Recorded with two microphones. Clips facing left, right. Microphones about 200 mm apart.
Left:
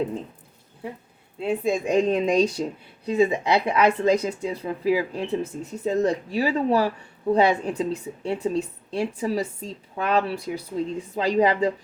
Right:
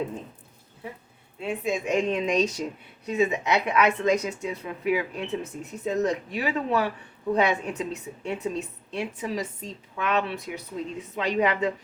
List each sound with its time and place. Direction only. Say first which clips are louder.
1.4 s speech: left 4 dB; 35° left (ahead or behind)